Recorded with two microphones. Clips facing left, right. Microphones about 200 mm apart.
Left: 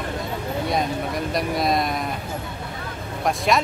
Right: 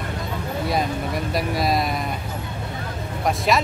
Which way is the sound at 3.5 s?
Centre (ahead or behind).